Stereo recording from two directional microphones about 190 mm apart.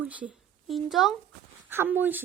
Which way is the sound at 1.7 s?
10° right (ahead or behind).